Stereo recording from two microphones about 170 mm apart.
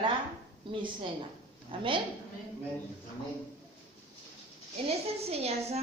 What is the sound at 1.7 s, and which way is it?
Speech, 30° right (ahead or behind).